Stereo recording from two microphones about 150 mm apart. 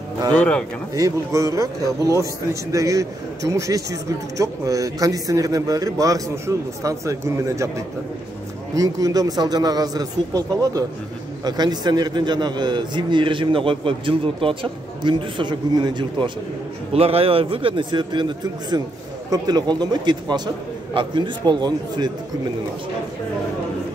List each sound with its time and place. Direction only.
0.3 s speech: 5° left (ahead or behind)
0.9 s a man's voice: 20° right (ahead or behind)
8.7 s a man's voice: 25° right (ahead or behind)